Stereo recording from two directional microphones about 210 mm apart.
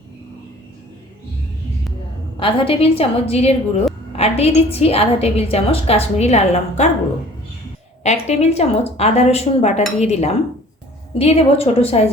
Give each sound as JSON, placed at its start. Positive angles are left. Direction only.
{"t": 2.4, "sound": "a woman's voice", "side_deg": 25}
{"t": 8.0, "sound": "a woman's voice", "side_deg": 30}